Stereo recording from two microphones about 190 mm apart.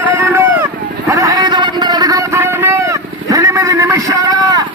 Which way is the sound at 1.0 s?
15° right (ahead or behind).